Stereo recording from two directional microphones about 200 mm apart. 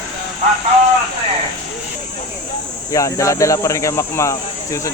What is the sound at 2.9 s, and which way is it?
Speech, 15° left (ahead or behind).